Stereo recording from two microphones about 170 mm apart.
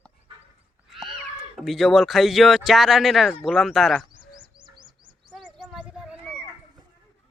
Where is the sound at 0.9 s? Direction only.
Centre (ahead or behind).